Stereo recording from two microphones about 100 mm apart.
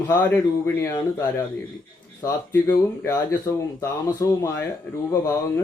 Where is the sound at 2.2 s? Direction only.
30° left (ahead or behind).